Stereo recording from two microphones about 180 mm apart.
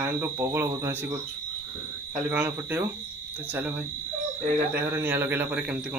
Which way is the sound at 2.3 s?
10° right (ahead or behind).